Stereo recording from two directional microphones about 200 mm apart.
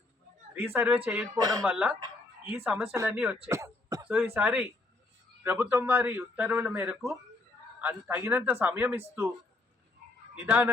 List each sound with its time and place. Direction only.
0.5 s a man's voice: 10° right (ahead or behind)
1.4 s speech: 20° right (ahead or behind)
1.6 s a man's voice: 5° right (ahead or behind)
4.4 s a man's voice: 5° right (ahead or behind)
10.3 s a man's voice: 10° right (ahead or behind)